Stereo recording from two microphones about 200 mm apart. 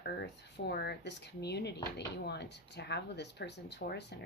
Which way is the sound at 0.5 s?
50° left (ahead or behind).